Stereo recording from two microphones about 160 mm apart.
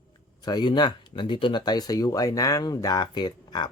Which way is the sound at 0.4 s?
30° left (ahead or behind).